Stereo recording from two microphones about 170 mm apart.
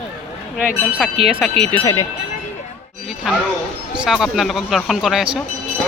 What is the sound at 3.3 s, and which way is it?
Speech, centre (ahead or behind).